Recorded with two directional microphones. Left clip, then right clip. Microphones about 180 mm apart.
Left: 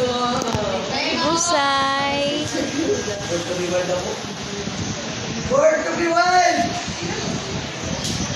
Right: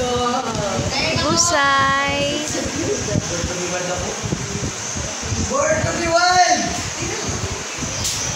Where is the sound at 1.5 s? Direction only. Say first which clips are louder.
Right 4 dB; 5° left (ahead or behind).